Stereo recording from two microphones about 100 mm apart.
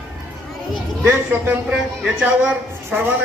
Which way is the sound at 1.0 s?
20° right (ahead or behind).